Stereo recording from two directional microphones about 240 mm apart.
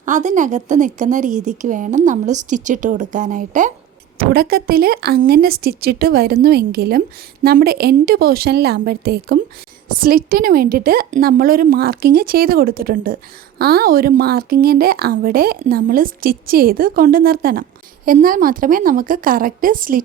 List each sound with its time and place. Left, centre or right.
0.0 s speech: right